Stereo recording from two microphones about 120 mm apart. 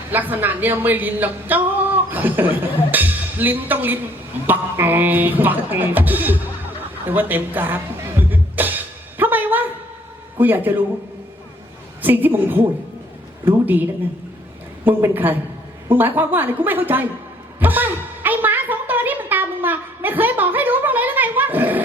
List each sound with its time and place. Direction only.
0.1 s a woman's voice: 15° right (ahead or behind)
7.1 s music: 15° right (ahead or behind)
10.3 s speech: 15° right (ahead or behind)
12.0 s a woman's voice: 15° right (ahead or behind)
14.8 s a woman's voice: 15° right (ahead or behind)
17.6 s a sound: 15° right (ahead or behind)